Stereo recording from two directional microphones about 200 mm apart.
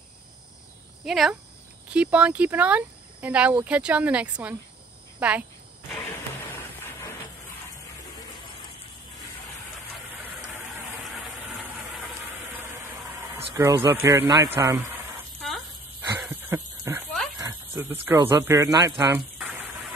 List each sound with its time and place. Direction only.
1.0 s speech: centre (ahead or behind)
10.7 s vehicle: centre (ahead or behind)
13.3 s vehicle: 15° right (ahead or behind)
14.0 s speech: 15° right (ahead or behind)
16.1 s a sound: 15° right (ahead or behind)
17.4 s squeal: 15° right (ahead or behind)
18.0 s speech: 15° right (ahead or behind)